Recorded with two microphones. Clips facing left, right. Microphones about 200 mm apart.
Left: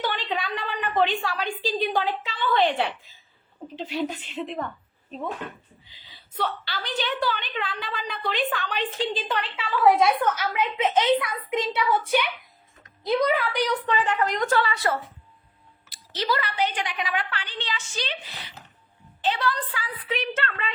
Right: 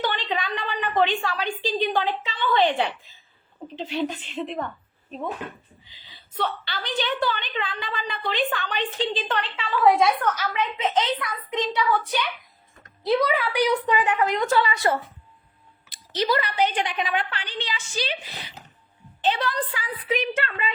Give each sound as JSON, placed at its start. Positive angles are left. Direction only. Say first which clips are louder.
{"t": 0.0, "sound": "a woman's voice", "louder": "right 1 dB", "side_deg": 5}
{"t": 6.3, "sound": "a woman's voice", "louder": "right 1 dB", "side_deg": 5}
{"t": 13.1, "sound": "a woman's voice", "louder": "right 1 dB", "side_deg": 0}